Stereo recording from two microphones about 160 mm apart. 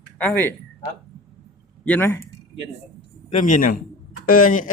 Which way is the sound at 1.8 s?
10° left (ahead or behind).